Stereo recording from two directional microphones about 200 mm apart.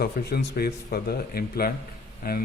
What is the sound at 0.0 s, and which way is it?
Speech, 50° left (ahead or behind).